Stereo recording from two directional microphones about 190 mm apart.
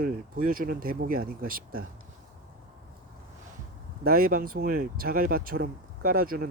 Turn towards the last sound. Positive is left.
turn(degrees=-50)  # may be behind; listen again after turning